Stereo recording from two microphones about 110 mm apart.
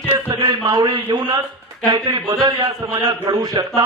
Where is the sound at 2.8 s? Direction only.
40° right (ahead or behind).